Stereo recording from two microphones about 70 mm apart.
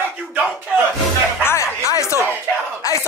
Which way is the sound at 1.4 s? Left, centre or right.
Left.